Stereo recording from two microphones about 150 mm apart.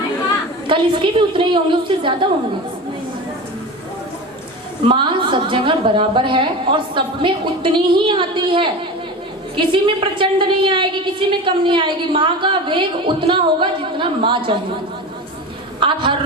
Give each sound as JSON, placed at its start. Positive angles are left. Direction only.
{"t": 0.7, "sound": "a woman's voice", "side_deg": -35}
{"t": 4.8, "sound": "a woman's voice", "side_deg": -35}
{"t": 15.8, "sound": "a woman's voice", "side_deg": -35}